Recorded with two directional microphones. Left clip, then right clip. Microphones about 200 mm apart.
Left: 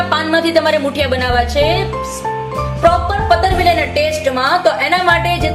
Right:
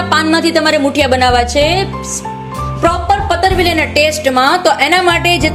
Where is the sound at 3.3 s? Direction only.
50° right (ahead or behind).